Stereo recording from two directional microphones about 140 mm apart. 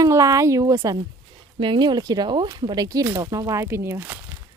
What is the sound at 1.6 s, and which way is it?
Speech, 35° right (ahead or behind).